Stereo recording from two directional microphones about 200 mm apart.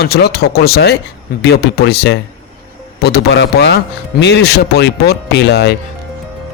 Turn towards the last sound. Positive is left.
turn(degrees=55)  # may be behind; listen again after turning